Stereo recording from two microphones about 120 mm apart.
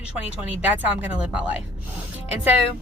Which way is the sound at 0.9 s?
10° right (ahead or behind).